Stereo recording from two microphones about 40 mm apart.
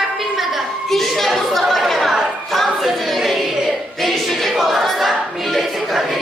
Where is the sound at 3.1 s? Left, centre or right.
Centre.